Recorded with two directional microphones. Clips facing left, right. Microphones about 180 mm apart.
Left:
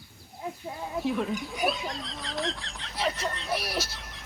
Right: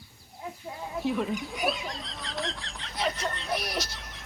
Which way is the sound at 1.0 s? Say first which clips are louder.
Right 1 dB; centre (ahead or behind).